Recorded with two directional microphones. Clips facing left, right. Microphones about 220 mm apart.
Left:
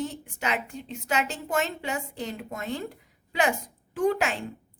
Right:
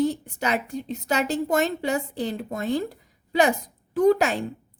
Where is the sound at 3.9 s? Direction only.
40° right (ahead or behind).